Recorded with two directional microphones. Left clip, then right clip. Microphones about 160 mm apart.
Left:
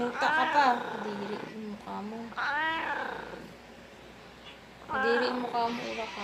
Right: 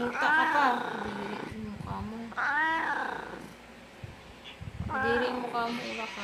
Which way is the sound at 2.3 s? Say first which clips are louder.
Right 2 dB; 25° right (ahead or behind).